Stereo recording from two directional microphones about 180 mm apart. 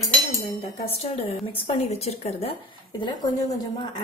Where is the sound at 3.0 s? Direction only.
25° left (ahead or behind).